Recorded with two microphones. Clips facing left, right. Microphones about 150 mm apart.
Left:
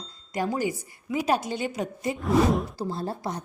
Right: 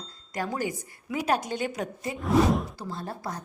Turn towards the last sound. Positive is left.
turn(degrees=25)  # may be behind; listen again after turning